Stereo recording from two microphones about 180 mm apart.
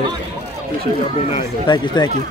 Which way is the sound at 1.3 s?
25° left (ahead or behind).